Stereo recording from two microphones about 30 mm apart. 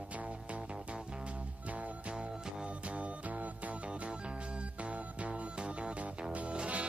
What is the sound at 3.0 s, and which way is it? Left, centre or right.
Music, right.